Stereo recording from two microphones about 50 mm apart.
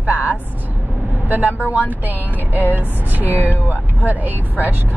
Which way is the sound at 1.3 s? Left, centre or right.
Right.